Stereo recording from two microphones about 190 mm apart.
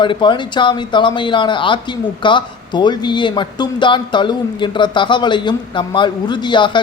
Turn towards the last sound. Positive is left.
turn(degrees=25)  # may be behind; listen again after turning